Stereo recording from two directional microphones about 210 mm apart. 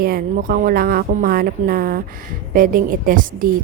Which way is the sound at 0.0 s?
45° right (ahead or behind).